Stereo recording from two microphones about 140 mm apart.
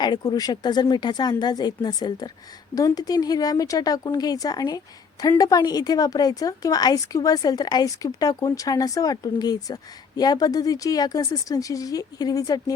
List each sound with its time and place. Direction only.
0.0 s a woman's voice: 30° left (ahead or behind)